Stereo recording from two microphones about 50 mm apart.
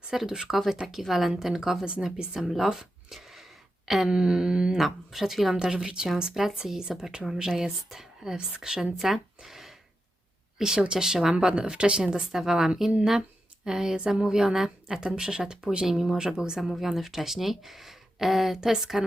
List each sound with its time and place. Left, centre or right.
0.1 s a woman's voice: centre
1.8 s a woman's voice: centre
2.3 s a sound: centre
4.1 s a woman's voice: centre
4.8 s a woman's voice: centre
6.3 s a woman's voice: centre